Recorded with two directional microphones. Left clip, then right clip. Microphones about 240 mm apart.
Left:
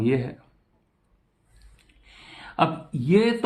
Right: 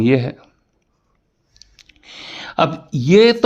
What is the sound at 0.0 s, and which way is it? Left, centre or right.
Speech, right.